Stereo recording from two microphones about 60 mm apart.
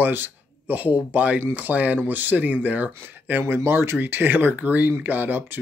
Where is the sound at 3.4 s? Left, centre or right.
Right.